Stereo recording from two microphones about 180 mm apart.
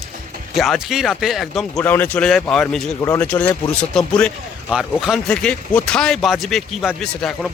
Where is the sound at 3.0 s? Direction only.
10° left (ahead or behind).